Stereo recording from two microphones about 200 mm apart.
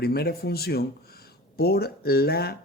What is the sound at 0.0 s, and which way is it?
Speech, 50° left (ahead or behind).